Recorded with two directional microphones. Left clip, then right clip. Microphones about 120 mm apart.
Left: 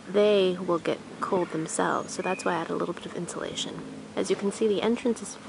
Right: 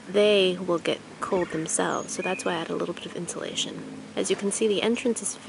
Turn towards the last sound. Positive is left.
turn(degrees=-5)  # may be behind; listen again after turning